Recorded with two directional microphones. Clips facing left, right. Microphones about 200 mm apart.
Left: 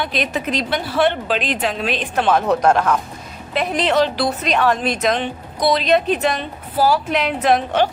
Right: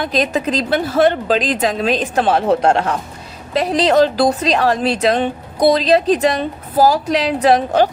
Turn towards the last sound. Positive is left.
turn(degrees=-35)  # may be behind; listen again after turning